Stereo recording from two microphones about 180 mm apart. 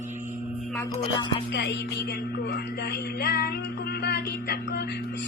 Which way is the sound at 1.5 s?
75° left (ahead or behind).